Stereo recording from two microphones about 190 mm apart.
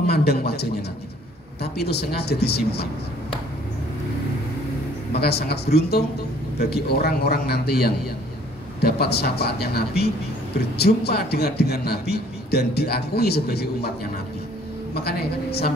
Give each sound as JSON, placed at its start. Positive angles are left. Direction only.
{"t": 0.0, "sound": "a man's voice", "side_deg": 55}
{"t": 1.9, "sound": "speech", "side_deg": 60}
{"t": 5.1, "sound": "speech", "side_deg": 60}
{"t": 15.0, "sound": "speech", "side_deg": 60}